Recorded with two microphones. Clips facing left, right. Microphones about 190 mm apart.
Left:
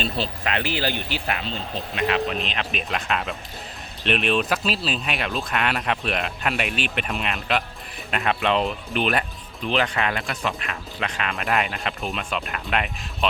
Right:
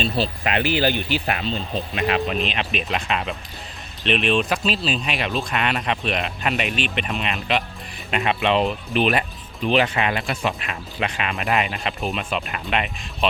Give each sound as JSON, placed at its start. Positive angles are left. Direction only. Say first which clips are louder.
{"t": 0.4, "sound": "speech", "louder": "right 5 dB", "side_deg": -15}
{"t": 2.9, "sound": "speech", "louder": "even", "side_deg": -5}
{"t": 4.2, "sound": "speech", "louder": "right 2 dB", "side_deg": 5}
{"t": 11.5, "sound": "speech", "louder": "right 1 dB", "side_deg": 0}